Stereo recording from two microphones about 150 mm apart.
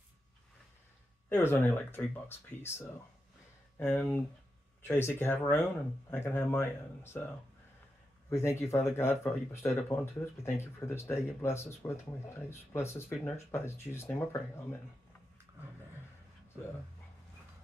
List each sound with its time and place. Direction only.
1.3 s speech: 15° left (ahead or behind)
3.8 s speech: 10° left (ahead or behind)
8.3 s speech: 15° left (ahead or behind)